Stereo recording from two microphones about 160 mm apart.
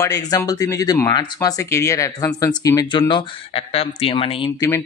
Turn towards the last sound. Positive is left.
turn(degrees=15)  # may be behind; listen again after turning